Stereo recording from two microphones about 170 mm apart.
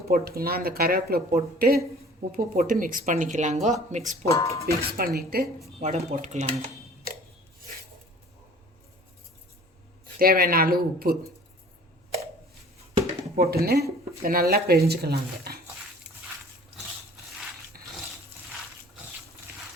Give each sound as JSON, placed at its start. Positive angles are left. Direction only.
{"t": 0.1, "sound": "speech", "side_deg": -65}
{"t": 4.3, "sound": "speech", "side_deg": 20}
{"t": 4.6, "sound": "speech", "side_deg": -65}
{"t": 5.8, "sound": "speech", "side_deg": -45}
{"t": 10.2, "sound": "speech", "side_deg": -60}
{"t": 13.3, "sound": "speech", "side_deg": -65}